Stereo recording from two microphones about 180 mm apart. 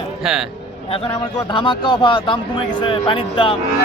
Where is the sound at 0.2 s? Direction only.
Centre (ahead or behind).